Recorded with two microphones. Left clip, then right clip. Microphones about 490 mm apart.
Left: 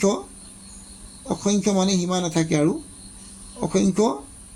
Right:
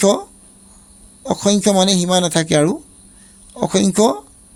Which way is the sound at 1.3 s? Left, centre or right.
Right.